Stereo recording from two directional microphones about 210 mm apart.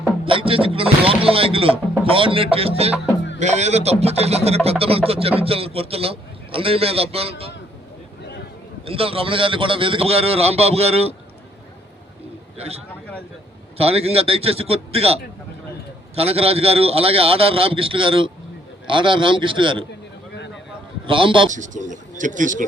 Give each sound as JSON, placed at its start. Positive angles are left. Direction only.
{"t": 0.3, "sound": "music", "side_deg": -25}
{"t": 3.3, "sound": "a man's voice", "side_deg": -35}
{"t": 8.8, "sound": "a man's voice", "side_deg": -25}
{"t": 12.5, "sound": "a man's voice", "side_deg": -30}
{"t": 21.1, "sound": "a man's voice", "side_deg": -25}
{"t": 21.5, "sound": "speech", "side_deg": -35}